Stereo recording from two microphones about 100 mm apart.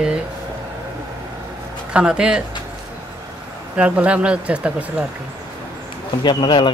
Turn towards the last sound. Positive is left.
turn(degrees=55)  # may be behind; listen again after turning